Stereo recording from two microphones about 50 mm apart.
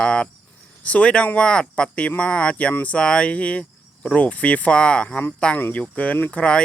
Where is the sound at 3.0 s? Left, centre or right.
Left.